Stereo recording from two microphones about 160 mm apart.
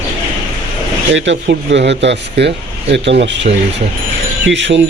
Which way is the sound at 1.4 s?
90° right.